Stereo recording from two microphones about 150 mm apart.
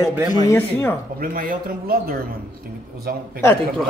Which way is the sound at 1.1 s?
70° right (ahead or behind).